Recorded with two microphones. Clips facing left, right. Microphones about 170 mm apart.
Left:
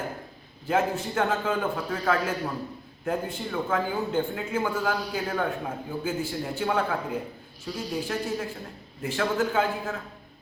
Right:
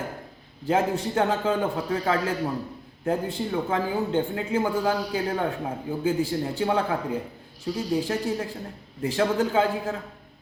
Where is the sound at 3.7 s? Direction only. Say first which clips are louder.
Even; 30° right (ahead or behind).